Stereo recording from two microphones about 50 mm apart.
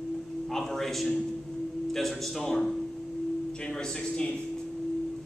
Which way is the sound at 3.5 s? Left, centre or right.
Centre.